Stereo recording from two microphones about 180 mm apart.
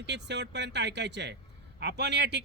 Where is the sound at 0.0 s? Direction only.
75° right (ahead or behind).